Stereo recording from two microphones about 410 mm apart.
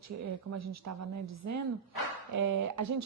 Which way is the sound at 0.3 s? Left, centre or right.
Right.